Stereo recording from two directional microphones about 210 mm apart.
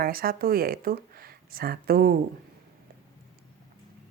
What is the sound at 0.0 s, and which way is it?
Speech, 45° right (ahead or behind).